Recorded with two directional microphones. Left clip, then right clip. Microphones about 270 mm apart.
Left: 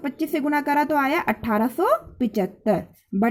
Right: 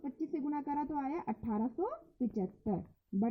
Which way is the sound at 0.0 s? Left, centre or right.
Left.